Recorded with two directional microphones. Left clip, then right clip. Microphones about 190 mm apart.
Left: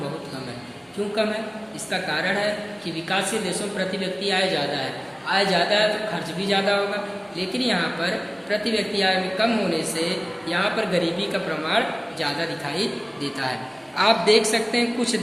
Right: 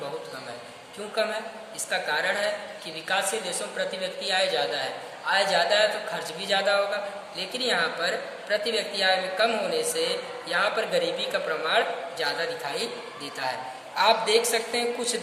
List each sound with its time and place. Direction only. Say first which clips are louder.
1.9 s a woman's voice: left 2 dB; 30° right (ahead or behind)
13.9 s a man's voice: left 3 dB; 20° right (ahead or behind)